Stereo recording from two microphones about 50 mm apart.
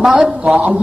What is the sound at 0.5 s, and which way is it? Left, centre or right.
Speech, right.